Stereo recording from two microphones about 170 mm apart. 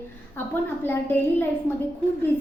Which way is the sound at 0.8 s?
15° left (ahead or behind).